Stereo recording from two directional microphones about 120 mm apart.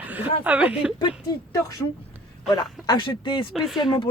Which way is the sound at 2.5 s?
35° left (ahead or behind).